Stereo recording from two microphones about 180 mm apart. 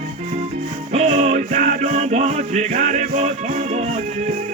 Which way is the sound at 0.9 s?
40° right (ahead or behind).